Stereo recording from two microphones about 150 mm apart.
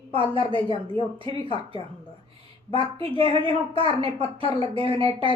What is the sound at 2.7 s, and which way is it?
Speech, 35° right (ahead or behind).